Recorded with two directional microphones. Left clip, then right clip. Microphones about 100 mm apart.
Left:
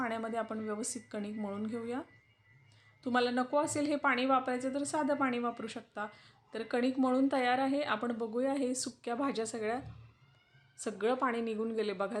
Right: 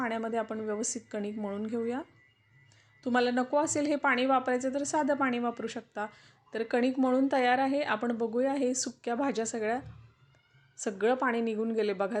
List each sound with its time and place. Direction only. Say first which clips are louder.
0.0 s a woman's voice: right 4 dB; 30° right (ahead or behind)